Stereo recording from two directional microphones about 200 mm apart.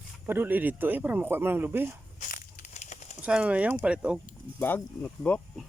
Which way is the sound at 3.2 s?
5° right (ahead or behind).